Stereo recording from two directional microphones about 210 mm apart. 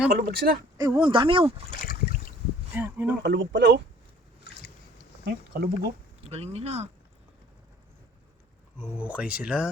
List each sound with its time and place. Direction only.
0.1 s speech: 45° right (ahead or behind)
0.8 s speech: 20° right (ahead or behind)
2.7 s speech: 10° right (ahead or behind)
3.2 s speech: 55° right (ahead or behind)
5.2 s speech: 50° right (ahead or behind)
6.2 s speech: 30° right (ahead or behind)
8.8 s speech: 10° right (ahead or behind)